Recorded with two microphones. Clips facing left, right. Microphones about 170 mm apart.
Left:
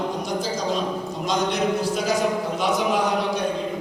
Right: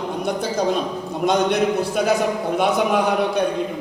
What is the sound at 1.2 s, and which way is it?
A man's voice, 60° right (ahead or behind).